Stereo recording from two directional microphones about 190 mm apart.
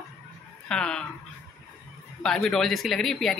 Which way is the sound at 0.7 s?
5° left (ahead or behind).